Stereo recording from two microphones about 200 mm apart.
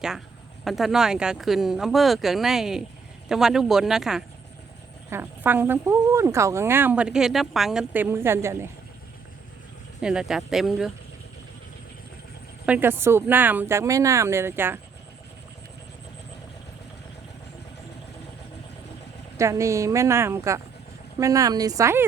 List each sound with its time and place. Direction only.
0.6 s speech: centre (ahead or behind)
10.0 s speech: 5° right (ahead or behind)
12.6 s speech: 10° right (ahead or behind)
19.4 s speech: 15° right (ahead or behind)